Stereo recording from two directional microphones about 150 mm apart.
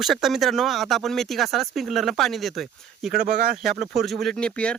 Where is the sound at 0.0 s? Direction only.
Centre (ahead or behind).